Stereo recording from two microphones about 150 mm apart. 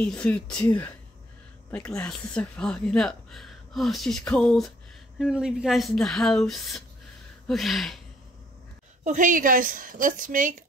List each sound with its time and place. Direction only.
0.0 s speech: 10° left (ahead or behind)
1.9 s speech: 5° left (ahead or behind)
9.0 s a woman's voice: 60° right (ahead or behind)